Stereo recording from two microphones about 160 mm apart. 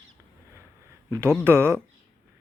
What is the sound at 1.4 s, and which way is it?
Speech, 15° right (ahead or behind).